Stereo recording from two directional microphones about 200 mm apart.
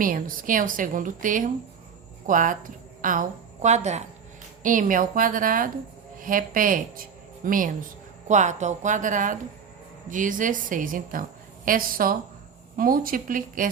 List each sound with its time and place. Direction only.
0.0 s a woman's voice: 45° right (ahead or behind)